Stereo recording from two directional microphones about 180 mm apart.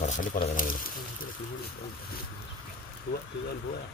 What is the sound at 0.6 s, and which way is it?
Speech, 50° left (ahead or behind).